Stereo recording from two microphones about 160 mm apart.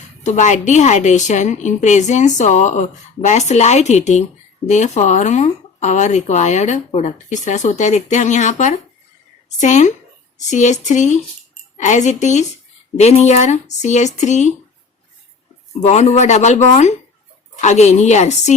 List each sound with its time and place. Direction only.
0.2 s speech: 50° left (ahead or behind)
15.8 s speech: 45° left (ahead or behind)